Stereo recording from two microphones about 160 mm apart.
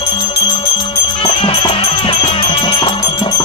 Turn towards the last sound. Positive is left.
turn(degrees=25)  # may be behind; listen again after turning